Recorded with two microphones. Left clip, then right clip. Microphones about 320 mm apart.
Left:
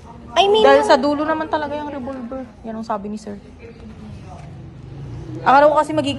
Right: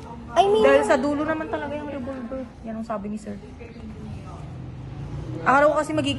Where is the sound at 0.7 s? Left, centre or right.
Centre.